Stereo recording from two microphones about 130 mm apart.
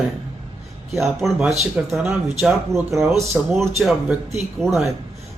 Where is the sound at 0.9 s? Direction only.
Centre (ahead or behind).